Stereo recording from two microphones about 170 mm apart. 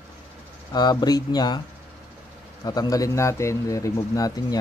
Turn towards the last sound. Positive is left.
turn(degrees=20)  # may be behind; listen again after turning